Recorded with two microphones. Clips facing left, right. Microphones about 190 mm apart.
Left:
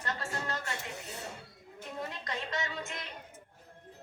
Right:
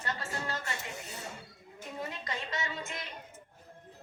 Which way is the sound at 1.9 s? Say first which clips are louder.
Even; 5° right (ahead or behind).